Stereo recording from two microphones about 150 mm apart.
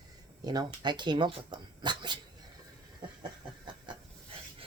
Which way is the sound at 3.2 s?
30° right (ahead or behind).